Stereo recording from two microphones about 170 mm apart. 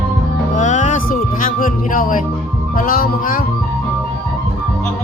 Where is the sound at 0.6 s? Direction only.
45° left (ahead or behind).